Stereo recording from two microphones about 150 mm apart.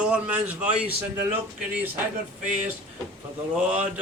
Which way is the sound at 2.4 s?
55° right (ahead or behind).